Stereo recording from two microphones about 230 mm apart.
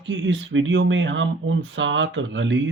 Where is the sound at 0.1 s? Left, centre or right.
Right.